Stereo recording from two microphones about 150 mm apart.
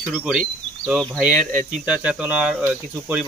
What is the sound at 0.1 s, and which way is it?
Speech, 5° right (ahead or behind).